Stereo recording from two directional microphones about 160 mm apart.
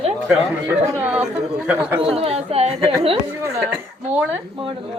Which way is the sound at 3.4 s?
15° right (ahead or behind).